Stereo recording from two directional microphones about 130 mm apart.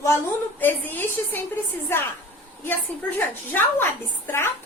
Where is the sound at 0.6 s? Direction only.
15° left (ahead or behind).